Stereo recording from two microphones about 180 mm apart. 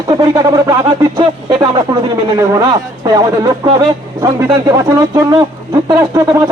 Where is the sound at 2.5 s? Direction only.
20° right (ahead or behind).